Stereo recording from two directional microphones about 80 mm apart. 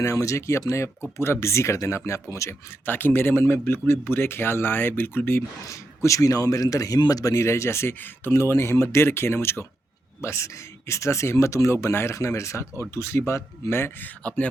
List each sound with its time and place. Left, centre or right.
0.0 s speech: left
2.8 s speech: left
5.6 s speech: left